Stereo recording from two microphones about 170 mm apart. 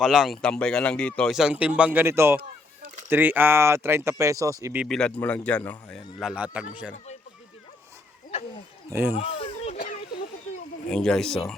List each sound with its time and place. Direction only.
0.0 s speech: centre (ahead or behind); by 4.8 s 20° right (ahead or behind)
4.8 s speech: 5° left (ahead or behind)
8.3 s wild animals: 35° left (ahead or behind)
8.9 s speech: 15° right (ahead or behind)
9.1 s a sound: 35° left (ahead or behind)
9.7 s a sound: 55° left (ahead or behind)
10.8 s speech: 5° left (ahead or behind)